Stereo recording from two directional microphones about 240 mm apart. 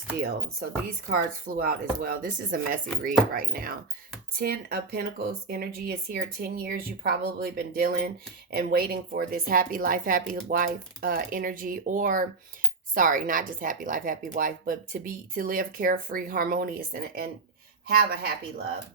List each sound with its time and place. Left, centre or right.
1.0 s speech: right